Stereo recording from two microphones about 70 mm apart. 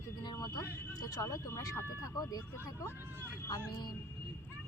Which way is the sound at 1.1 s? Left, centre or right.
Left.